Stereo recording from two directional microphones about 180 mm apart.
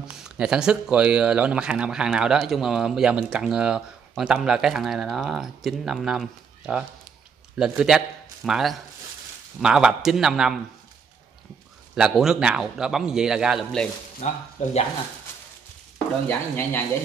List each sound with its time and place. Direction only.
0.0 s speech: 5° right (ahead or behind)
11.9 s speech: 5° right (ahead or behind)
14.2 s speech: 40° left (ahead or behind)
16.3 s speech: 10° left (ahead or behind)